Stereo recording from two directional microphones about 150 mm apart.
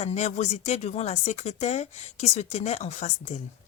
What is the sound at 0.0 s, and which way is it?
Speech, 50° left (ahead or behind).